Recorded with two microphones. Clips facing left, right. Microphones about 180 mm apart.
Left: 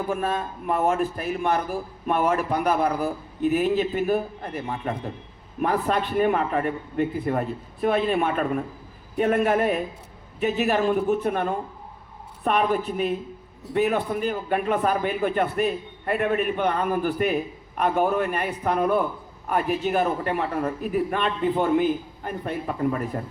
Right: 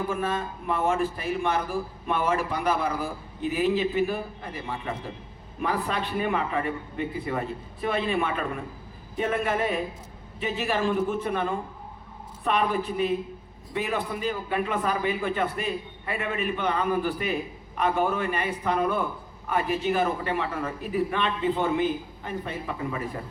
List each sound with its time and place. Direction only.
0.1 s a man's voice: 45° left (ahead or behind)